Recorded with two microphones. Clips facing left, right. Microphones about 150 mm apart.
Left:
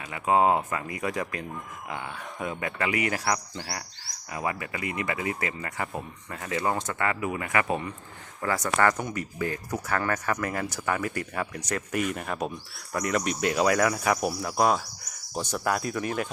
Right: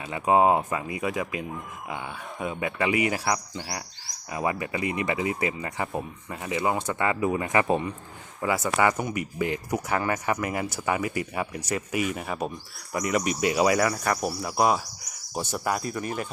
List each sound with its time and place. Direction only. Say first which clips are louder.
0.1 s speech: right 2 dB; 20° right (ahead or behind)
8.4 s speech: right 1 dB; 10° right (ahead or behind)
13.9 s speech: left 1 dB; 5° left (ahead or behind)